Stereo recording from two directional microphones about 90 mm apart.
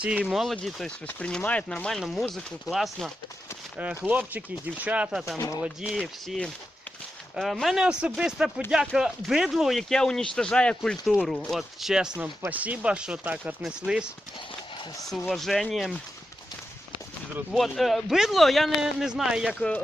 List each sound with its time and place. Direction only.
0.0 s speech: 15° right (ahead or behind)
0.3 s speech: 5° right (ahead or behind)
1.0 s speech: 15° left (ahead or behind)
1.7 s speech: 5° left (ahead or behind)
3.8 s speech: 15° right (ahead or behind)
6.2 s speech: 5° left (ahead or behind)
11.0 s speech: 5° right (ahead or behind)
11.3 s speech: 5° left (ahead or behind)
15.3 s speech: centre (ahead or behind)
17.5 s speech: centre (ahead or behind)